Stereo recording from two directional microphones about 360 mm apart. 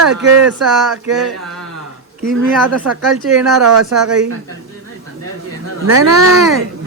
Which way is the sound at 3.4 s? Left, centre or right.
Centre.